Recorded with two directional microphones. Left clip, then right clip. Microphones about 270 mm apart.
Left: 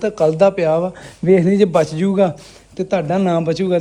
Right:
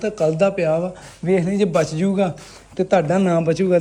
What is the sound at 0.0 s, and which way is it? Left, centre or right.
Speech, centre.